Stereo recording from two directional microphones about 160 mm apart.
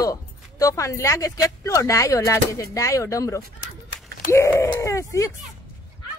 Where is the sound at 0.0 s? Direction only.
20° left (ahead or behind).